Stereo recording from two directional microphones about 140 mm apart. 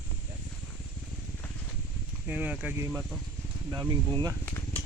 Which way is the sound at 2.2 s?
10° right (ahead or behind).